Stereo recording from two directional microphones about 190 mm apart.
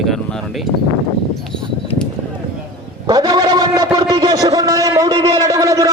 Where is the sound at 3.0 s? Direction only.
20° right (ahead or behind).